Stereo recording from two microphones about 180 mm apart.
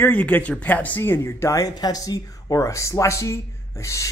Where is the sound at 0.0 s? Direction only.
10° left (ahead or behind).